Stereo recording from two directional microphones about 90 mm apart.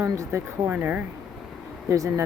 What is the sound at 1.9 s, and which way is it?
Speech, 35° right (ahead or behind).